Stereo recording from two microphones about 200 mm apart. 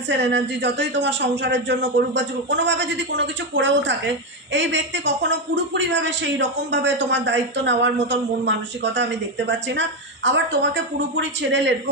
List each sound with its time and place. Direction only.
0.1 s a man's voice: 60° right (ahead or behind)